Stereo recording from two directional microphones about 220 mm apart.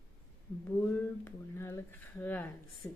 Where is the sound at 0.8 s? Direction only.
10° left (ahead or behind).